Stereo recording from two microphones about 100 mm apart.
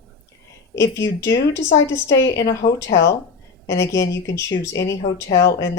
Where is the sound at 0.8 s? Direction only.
30° left (ahead or behind).